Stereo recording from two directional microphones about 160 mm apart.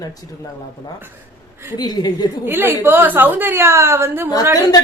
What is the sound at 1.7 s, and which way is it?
Speech, 25° left (ahead or behind).